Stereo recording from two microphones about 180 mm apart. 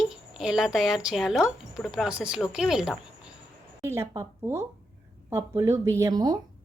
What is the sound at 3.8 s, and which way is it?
Speech, 15° right (ahead or behind).